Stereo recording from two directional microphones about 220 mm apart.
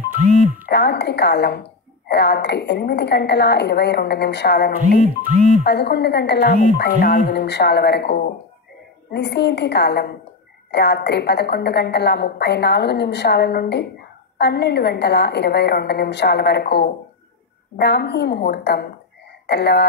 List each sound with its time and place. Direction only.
0.7 s a woman's voice: 50° left (ahead or behind)
5.0 s speech: 35° right (ahead or behind)
5.6 s a woman's voice: 50° left (ahead or behind)